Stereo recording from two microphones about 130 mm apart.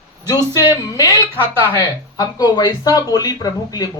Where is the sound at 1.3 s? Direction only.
15° right (ahead or behind).